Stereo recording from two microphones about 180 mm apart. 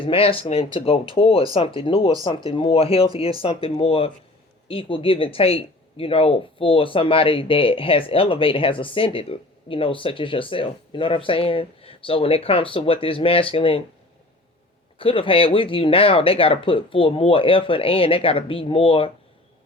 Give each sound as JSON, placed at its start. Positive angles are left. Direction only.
{"t": 0.0, "sound": "speech", "side_deg": 30}
{"t": 14.9, "sound": "speech", "side_deg": 30}